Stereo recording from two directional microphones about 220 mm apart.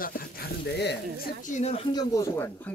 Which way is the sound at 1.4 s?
30° left (ahead or behind).